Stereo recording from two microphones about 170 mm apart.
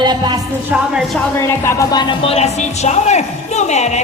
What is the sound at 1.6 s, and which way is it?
Speech, 20° left (ahead or behind).